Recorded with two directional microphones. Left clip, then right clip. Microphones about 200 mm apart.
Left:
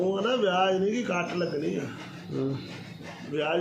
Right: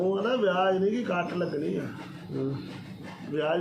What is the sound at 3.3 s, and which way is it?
Speech, 5° right (ahead or behind).